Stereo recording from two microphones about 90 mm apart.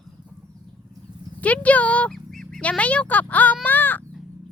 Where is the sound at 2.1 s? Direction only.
5° left (ahead or behind).